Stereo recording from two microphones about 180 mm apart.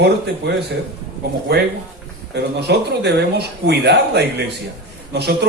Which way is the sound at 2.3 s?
70° right (ahead or behind).